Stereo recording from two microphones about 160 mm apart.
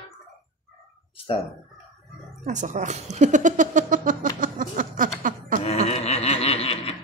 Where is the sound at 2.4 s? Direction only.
50° right (ahead or behind).